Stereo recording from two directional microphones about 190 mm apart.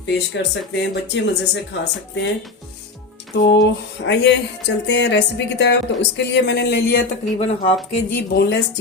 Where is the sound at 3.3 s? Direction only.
65° left (ahead or behind).